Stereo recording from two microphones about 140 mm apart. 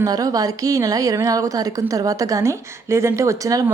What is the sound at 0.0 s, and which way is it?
A woman's voice, 25° right (ahead or behind).